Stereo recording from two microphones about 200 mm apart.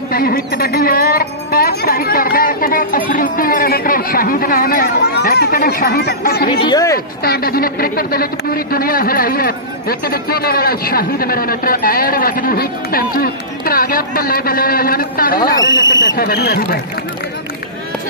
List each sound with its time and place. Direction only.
0.1 s speech: 45° left (ahead or behind)
6.6 s speech: 20° left (ahead or behind)
7.2 s speech: 50° left (ahead or behind)
15.8 s speech: 65° left (ahead or behind)